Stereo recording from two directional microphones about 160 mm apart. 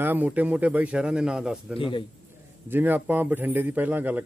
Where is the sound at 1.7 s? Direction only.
30° left (ahead or behind).